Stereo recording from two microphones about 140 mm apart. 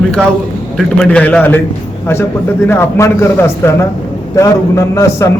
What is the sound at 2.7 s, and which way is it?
A man's voice, 20° left (ahead or behind).